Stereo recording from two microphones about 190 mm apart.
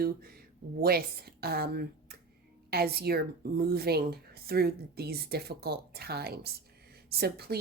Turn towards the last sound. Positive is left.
turn(degrees=-55)  # may be behind; listen again after turning